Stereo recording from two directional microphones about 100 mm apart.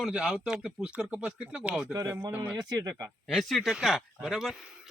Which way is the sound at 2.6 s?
35° right (ahead or behind).